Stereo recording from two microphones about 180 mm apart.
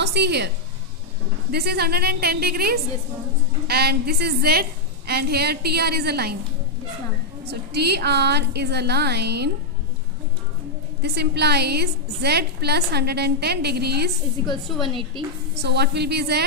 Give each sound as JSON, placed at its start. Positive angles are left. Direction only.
{"t": 0.0, "sound": "a woman's voice", "side_deg": -70}
{"t": 1.5, "sound": "a woman's voice", "side_deg": -60}
{"t": 7.4, "sound": "a woman's voice", "side_deg": -65}
{"t": 11.0, "sound": "a woman's voice", "side_deg": -65}
{"t": 14.9, "sound": "a woman's voice", "side_deg": -30}
{"t": 15.5, "sound": "a woman's voice", "side_deg": -70}